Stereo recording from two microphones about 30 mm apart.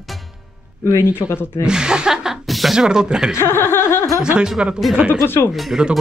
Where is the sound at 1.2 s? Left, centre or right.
Right.